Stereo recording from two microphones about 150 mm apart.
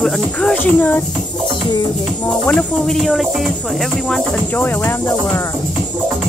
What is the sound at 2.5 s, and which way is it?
Speech, 5° left (ahead or behind).